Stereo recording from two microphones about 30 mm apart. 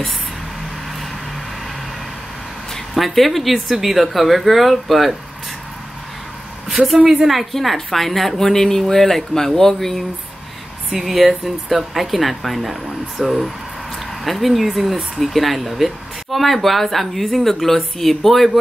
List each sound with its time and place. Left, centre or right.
2.7 s speech: centre
6.8 s a woman's voice: centre
11.0 s speech: centre